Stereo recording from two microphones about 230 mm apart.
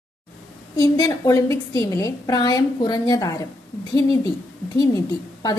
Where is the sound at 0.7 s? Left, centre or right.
Centre.